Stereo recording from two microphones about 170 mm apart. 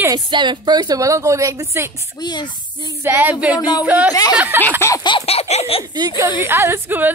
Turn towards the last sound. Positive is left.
turn(degrees=-10)  # may be behind; listen again after turning